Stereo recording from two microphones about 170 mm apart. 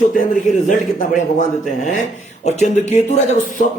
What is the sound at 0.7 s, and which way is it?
A man's voice, 50° left (ahead or behind).